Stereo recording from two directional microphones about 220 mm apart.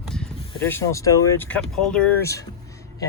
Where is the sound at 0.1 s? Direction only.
5° left (ahead or behind).